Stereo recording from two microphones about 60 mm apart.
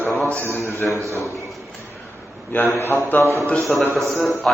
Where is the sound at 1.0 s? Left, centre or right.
Right.